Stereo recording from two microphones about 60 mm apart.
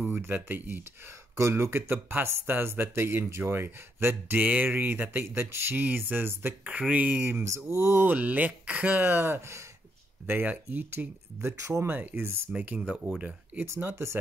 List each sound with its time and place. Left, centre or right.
0.2 s speech: right
1.3 s speech: right
7.4 s mantra: right
8.0 s speech: right
8.9 s speech: right
11.4 s speech: right
12.2 s mantra: right
12.6 s speech: right
13.6 s mantra: right